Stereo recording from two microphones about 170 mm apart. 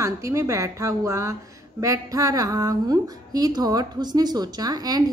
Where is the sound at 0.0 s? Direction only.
15° right (ahead or behind).